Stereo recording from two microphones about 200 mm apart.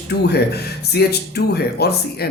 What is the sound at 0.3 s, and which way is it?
A man's voice, 55° left (ahead or behind).